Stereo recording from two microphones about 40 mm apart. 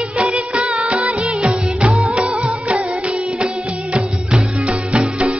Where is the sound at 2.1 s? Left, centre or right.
Right.